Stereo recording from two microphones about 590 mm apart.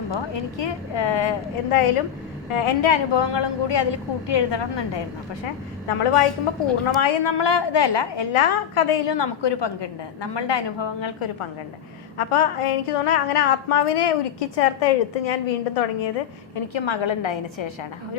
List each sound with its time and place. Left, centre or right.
0.1 s a woman's voice: left
5.9 s a woman's voice: left
16.7 s a woman's voice: left